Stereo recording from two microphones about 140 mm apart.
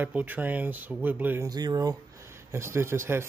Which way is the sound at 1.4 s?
30° right (ahead or behind).